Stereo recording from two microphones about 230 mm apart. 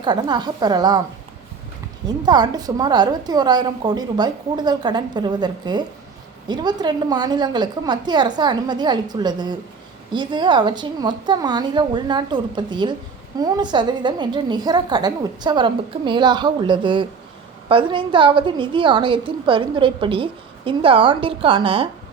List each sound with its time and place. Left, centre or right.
0.0 s a woman's voice: centre
2.0 s a woman's voice: centre